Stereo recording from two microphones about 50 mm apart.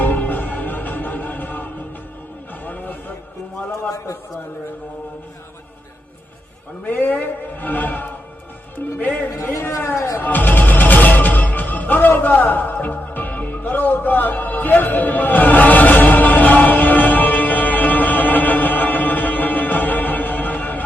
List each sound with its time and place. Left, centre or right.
0.0 s music: left
2.6 s a sound: left
3.7 s a man's voice: left
6.8 s a man's voice: left
9.3 s a man's voice: left
10.2 s music: left